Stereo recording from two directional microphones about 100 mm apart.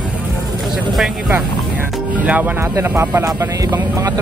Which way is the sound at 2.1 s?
15° right (ahead or behind).